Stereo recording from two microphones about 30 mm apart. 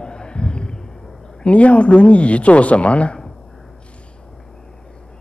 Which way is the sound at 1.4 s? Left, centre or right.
Left.